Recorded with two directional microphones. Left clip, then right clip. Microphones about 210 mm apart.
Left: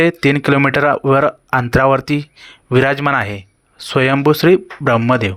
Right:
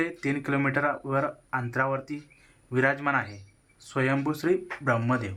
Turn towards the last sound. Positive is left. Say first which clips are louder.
# left 13 dB
turn(degrees=35)  # may be behind; listen again after turning